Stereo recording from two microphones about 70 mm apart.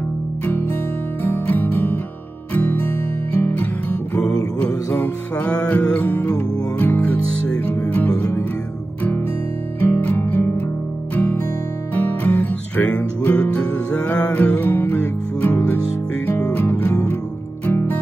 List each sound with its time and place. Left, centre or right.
1.2 s music: left
5.9 s music: left
6.2 s music: centre
6.8 s music: left
9.8 s music: left
11.9 s music: left
17.6 s music: left